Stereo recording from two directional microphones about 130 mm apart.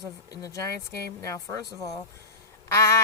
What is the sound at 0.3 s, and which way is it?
Speech, 25° left (ahead or behind).